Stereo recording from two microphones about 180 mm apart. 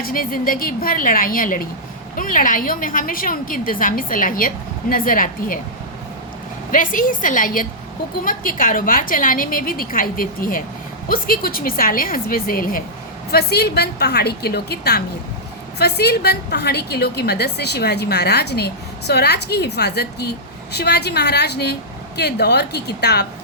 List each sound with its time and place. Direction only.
0.0 s a woman's voice: 50° left (ahead or behind)
6.7 s a woman's voice: 50° left (ahead or behind); by 23.2 s 65° left (ahead or behind)